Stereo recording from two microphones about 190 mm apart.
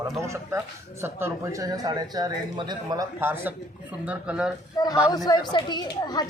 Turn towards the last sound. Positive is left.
turn(degrees=20)  # may be behind; listen again after turning